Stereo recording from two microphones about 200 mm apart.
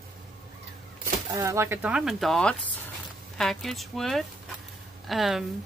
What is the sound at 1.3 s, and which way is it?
Speech, 15° right (ahead or behind).